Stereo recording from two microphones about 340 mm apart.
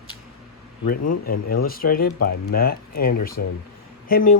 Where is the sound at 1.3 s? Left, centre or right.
Left.